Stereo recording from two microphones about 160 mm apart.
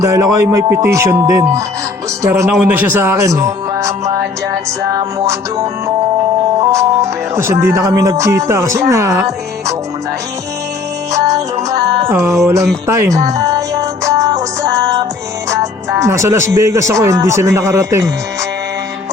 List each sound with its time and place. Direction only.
0.0 s speech: 20° right (ahead or behind)
11.1 s music: 20° right (ahead or behind)
15.4 s speech: 20° right (ahead or behind)